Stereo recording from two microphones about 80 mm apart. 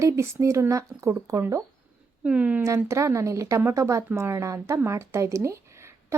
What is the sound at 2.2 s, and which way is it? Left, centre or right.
Speech, centre.